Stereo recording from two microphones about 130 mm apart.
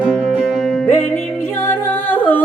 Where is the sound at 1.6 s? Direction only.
15° left (ahead or behind).